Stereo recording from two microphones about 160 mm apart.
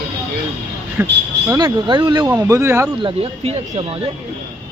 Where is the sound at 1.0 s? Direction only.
10° right (ahead or behind).